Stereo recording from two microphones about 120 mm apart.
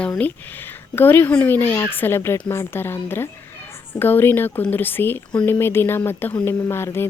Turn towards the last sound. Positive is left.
turn(degrees=20)  # may be behind; listen again after turning